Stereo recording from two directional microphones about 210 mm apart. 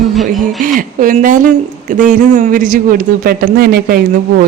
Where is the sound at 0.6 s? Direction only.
40° right (ahead or behind).